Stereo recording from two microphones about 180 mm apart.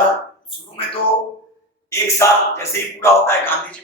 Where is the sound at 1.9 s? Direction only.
15° left (ahead or behind).